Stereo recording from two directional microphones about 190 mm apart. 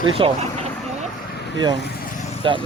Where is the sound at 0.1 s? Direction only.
30° right (ahead or behind).